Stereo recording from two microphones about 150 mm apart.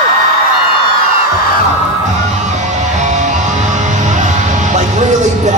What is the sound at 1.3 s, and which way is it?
Music, 90° left.